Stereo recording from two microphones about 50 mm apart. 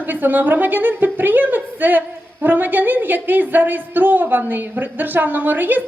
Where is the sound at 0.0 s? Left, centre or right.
Right.